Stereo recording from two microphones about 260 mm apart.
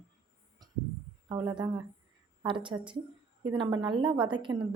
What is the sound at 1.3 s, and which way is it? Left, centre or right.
A woman's voice, centre.